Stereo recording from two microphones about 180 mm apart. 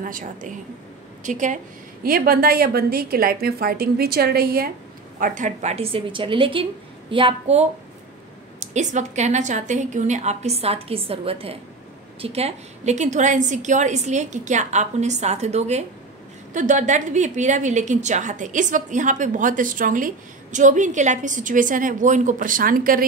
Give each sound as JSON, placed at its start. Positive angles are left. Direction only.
{"t": 0.0, "sound": "a woman's voice", "side_deg": -50}
{"t": 2.0, "sound": "a woman's voice", "side_deg": -55}
{"t": 5.2, "sound": "a woman's voice", "side_deg": -45}